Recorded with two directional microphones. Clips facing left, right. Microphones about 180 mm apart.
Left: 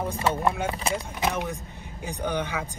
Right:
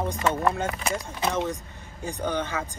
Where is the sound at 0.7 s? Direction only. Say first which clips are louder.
Left 1 dB; 30° left (ahead or behind).